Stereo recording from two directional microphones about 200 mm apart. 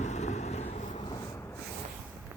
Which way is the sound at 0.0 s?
35° left (ahead or behind).